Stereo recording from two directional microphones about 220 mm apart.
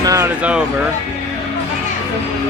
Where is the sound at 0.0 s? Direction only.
15° right (ahead or behind).